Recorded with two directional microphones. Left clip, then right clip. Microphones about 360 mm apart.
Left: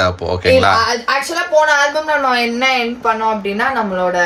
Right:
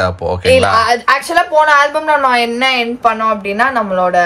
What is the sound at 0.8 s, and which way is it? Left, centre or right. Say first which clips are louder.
Speech: right 4 dB; right.